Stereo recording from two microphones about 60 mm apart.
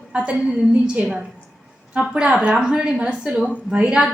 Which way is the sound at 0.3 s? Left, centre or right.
Right.